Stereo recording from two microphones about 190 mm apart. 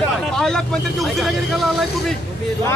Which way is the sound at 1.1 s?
Centre (ahead or behind).